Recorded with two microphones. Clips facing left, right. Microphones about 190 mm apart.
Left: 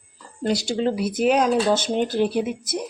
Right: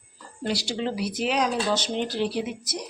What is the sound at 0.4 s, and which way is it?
Speech, 45° left (ahead or behind).